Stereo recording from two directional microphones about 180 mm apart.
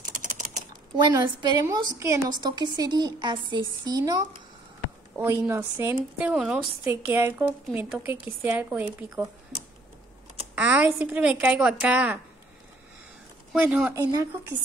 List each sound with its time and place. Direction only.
0.0 s typing: 45° right (ahead or behind)
0.9 s a woman's voice: 25° right (ahead or behind)
10.5 s a woman's voice: 10° right (ahead or behind)
13.6 s a woman's voice: 5° right (ahead or behind)
14.1 s a woman's voice: 15° right (ahead or behind)